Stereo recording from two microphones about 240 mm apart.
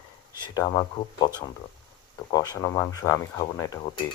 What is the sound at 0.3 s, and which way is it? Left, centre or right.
Speech, centre.